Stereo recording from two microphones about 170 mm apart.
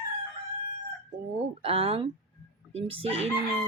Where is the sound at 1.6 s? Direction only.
35° right (ahead or behind).